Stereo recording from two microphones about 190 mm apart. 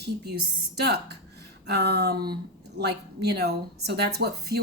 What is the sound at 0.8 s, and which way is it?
Speech, 60° right (ahead or behind).